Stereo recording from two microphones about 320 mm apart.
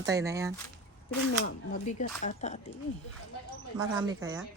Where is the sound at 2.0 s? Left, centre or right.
Left.